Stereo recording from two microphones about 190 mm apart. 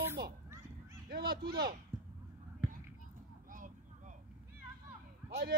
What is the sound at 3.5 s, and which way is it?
Vehicle, 45° right (ahead or behind).